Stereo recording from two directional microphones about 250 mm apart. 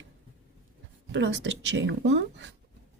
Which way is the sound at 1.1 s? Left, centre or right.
Right.